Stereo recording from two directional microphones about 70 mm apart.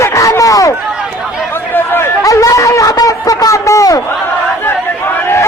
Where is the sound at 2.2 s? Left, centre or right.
Left.